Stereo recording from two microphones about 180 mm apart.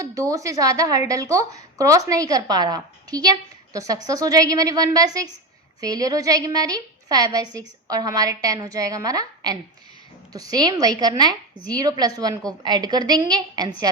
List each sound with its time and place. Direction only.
0.0 s a woman's voice: 20° right (ahead or behind)